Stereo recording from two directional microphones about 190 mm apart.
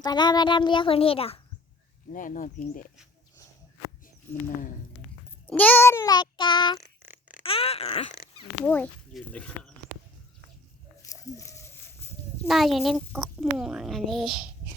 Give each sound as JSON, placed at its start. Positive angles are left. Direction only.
{"t": 0.0, "sound": "a child's voice", "side_deg": 20}
{"t": 2.1, "sound": "speech", "side_deg": 45}
{"t": 5.5, "sound": "child singing", "side_deg": 10}
{"t": 7.0, "sound": "a sound", "side_deg": -10}
{"t": 7.4, "sound": "a child's voice", "side_deg": 30}
{"t": 8.6, "sound": "child singing", "side_deg": 10}
{"t": 11.0, "sound": "livestock", "side_deg": 15}
{"t": 12.5, "sound": "speech", "side_deg": 0}